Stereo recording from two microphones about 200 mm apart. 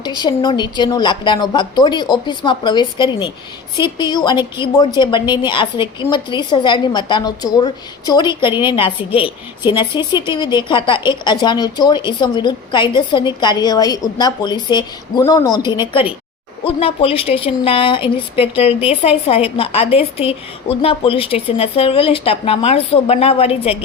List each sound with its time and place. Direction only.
0.0 s a woman's voice: 20° left (ahead or behind)